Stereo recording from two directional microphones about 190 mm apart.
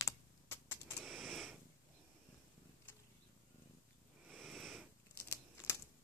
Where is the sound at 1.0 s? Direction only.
Centre (ahead or behind).